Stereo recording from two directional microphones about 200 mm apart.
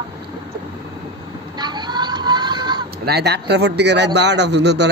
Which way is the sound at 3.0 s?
55° right (ahead or behind).